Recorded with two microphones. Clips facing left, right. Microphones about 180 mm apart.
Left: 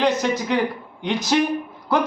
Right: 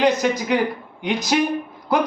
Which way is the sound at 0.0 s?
10° right (ahead or behind).